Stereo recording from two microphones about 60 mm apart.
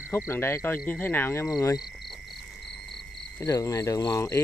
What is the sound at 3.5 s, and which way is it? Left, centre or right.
Speech, left.